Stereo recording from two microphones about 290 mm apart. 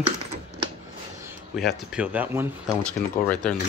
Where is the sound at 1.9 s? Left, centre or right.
Centre.